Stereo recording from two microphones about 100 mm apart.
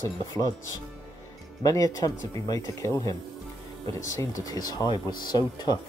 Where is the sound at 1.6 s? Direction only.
35° left (ahead or behind).